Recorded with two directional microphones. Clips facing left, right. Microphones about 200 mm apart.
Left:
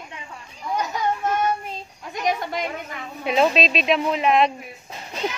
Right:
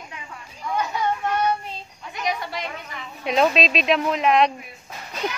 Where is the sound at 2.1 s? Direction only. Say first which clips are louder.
Left 3 dB; 45° left (ahead or behind).